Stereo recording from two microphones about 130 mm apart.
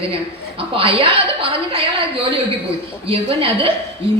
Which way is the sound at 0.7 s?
45° right (ahead or behind).